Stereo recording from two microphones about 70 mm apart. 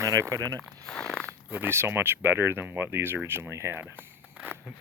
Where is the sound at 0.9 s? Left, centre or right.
Centre.